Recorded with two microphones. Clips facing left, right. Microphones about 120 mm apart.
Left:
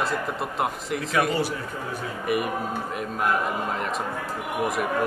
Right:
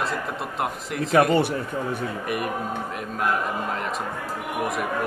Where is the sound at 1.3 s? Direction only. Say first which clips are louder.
Right 5 dB; 60° right (ahead or behind).